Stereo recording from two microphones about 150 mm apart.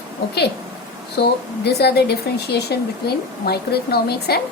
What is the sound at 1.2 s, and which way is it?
Speech, 90° left.